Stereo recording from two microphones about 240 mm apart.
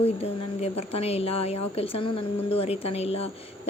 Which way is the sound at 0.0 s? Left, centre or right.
Left.